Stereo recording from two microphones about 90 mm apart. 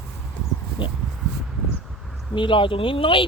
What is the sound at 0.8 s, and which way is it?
Speech, 75° left (ahead or behind).